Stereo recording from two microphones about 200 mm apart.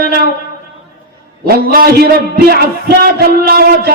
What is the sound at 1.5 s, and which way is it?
A man's voice, 50° right (ahead or behind).